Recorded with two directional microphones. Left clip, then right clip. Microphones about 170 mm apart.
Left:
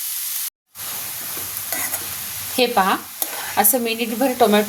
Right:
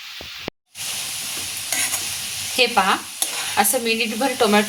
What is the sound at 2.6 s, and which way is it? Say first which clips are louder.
Speech: even; 60° left (ahead or behind).